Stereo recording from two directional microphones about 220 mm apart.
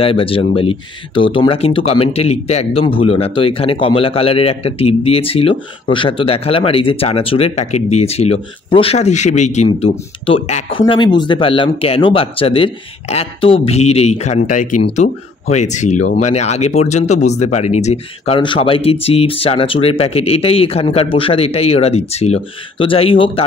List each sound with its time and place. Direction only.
0.0 s speech: 25° left (ahead or behind)